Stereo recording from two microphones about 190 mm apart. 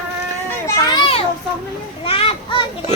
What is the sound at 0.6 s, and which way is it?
Children playing, 20° left (ahead or behind).